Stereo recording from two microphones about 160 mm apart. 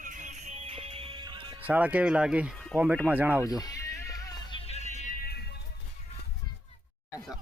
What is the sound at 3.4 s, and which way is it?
Music, 20° left (ahead or behind).